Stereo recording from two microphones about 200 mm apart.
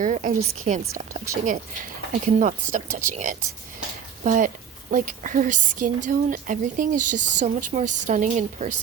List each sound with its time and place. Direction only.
0.0 s speech: 40° right (ahead or behind)